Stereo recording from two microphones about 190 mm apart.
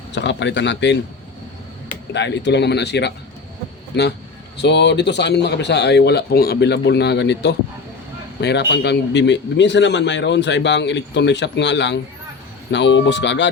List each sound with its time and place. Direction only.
0.1 s a man's voice: 70° left (ahead or behind)
2.1 s speech: 65° left (ahead or behind)
4.5 s a man's voice: 65° left (ahead or behind)